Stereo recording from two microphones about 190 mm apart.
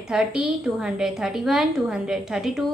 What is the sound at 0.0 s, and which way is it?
A woman's voice, 5° right (ahead or behind).